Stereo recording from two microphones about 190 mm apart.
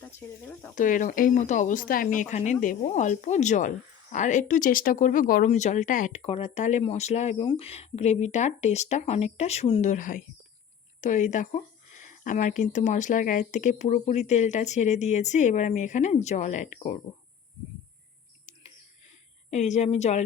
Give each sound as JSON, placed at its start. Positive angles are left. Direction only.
{"t": 0.0, "sound": "speech", "side_deg": 10}
{"t": 0.8, "sound": "speech", "side_deg": 45}
{"t": 19.5, "sound": "speech", "side_deg": 35}